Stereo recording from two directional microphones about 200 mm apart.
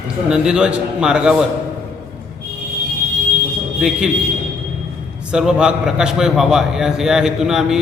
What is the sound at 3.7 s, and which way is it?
Speech, 5° right (ahead or behind).